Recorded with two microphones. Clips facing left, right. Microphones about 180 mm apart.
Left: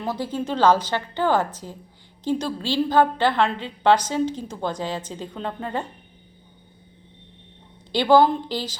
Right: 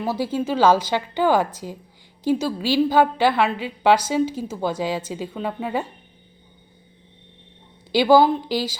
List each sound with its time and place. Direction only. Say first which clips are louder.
0.0 s a woman's voice: right 3 dB; 10° right (ahead or behind)
7.9 s a woman's voice: right 2 dB; 5° right (ahead or behind)